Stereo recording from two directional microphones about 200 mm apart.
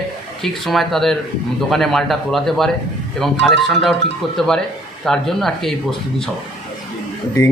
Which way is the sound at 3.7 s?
Centre (ahead or behind).